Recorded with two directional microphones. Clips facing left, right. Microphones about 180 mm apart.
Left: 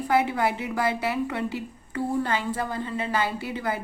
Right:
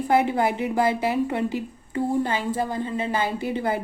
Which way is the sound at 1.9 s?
20° right (ahead or behind).